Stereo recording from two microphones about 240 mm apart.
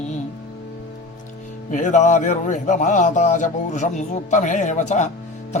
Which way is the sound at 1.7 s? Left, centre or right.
Left.